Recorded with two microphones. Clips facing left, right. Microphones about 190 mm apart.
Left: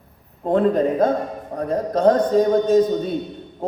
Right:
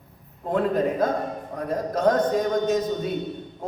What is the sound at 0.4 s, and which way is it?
A man's voice, 30° left (ahead or behind).